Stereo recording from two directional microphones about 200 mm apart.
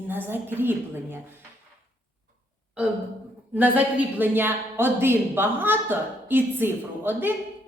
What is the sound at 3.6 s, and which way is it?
Speech, 10° right (ahead or behind).